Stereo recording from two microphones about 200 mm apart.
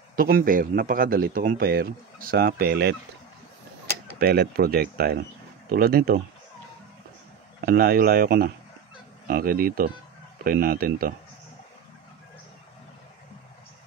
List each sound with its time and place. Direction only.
0.1 s speech: 45° right (ahead or behind)
4.2 s speech: 50° right (ahead or behind)
7.6 s speech: 50° right (ahead or behind)